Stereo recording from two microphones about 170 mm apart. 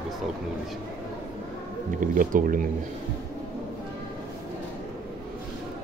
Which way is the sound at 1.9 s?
50° right (ahead or behind).